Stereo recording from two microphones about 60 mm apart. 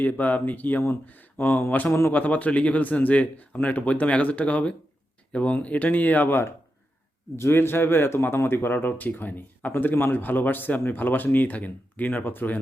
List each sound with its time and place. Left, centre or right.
0.0 s speech: left
7.3 s speech: left